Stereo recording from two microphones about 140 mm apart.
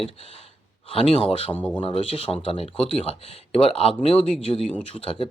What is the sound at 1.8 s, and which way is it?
Speech, 40° left (ahead or behind).